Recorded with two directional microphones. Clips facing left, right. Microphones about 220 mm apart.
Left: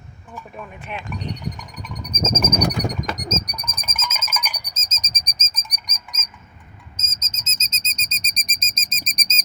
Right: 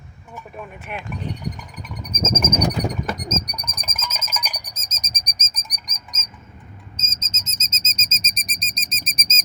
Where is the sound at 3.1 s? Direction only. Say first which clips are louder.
Even; 10° right (ahead or behind).